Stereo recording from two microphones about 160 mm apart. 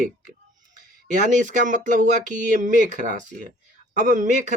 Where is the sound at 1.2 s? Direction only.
50° right (ahead or behind).